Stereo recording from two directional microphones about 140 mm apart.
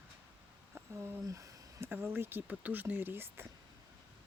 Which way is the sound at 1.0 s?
20° right (ahead or behind).